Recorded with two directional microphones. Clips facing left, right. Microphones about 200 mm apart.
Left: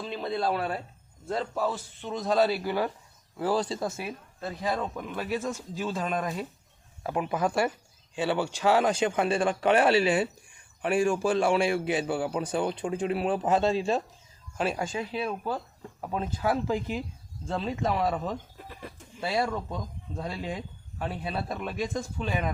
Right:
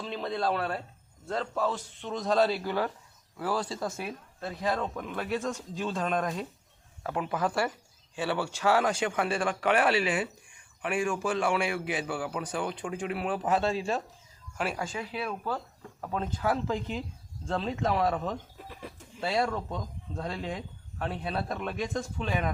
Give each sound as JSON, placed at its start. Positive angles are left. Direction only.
{"t": 0.0, "sound": "a sound", "side_deg": 5}
{"t": 1.3, "sound": "a man's voice", "side_deg": 10}
{"t": 3.3, "sound": "a man's voice", "side_deg": 25}
{"t": 3.8, "sound": "speech", "side_deg": 5}
{"t": 7.0, "sound": "a man's voice", "side_deg": 15}